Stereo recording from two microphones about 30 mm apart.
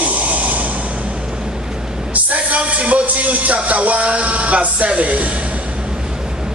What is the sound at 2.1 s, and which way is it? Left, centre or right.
Music, right.